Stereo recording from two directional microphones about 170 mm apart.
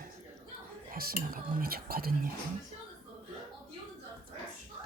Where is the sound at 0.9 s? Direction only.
60° right (ahead or behind).